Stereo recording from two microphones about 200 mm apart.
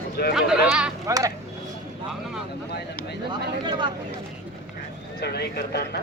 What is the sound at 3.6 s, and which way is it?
Speech, 25° right (ahead or behind).